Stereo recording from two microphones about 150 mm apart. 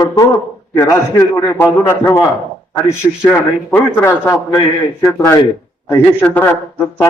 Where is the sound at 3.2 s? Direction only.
15° left (ahead or behind).